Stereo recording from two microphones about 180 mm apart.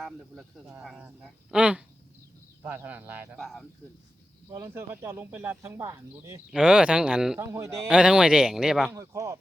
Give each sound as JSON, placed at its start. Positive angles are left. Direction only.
{"t": 0.8, "sound": "speech", "side_deg": -5}
{"t": 3.3, "sound": "speech", "side_deg": 0}
{"t": 4.5, "sound": "speech", "side_deg": -15}
{"t": 6.5, "sound": "speech", "side_deg": -5}
{"t": 7.3, "sound": "speech", "side_deg": -15}
{"t": 7.9, "sound": "speech", "side_deg": -5}
{"t": 8.9, "sound": "speech", "side_deg": -20}